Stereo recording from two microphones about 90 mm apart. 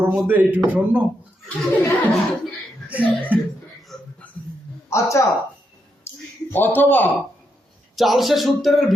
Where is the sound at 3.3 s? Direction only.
15° right (ahead or behind).